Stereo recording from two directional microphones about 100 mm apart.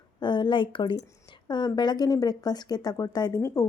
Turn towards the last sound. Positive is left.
turn(degrees=35)  # may be behind; listen again after turning